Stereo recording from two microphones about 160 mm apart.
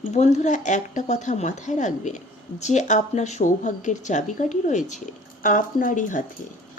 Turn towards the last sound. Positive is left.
turn(degrees=55)  # may be behind; listen again after turning